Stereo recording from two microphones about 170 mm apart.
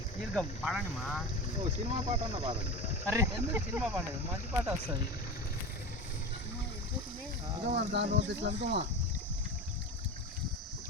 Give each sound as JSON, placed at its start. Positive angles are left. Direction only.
{"t": 0.3, "sound": "speech", "side_deg": 0}
{"t": 1.9, "sound": "speech", "side_deg": -35}
{"t": 3.1, "sound": "speech", "side_deg": -10}
{"t": 7.8, "sound": "speech", "side_deg": -85}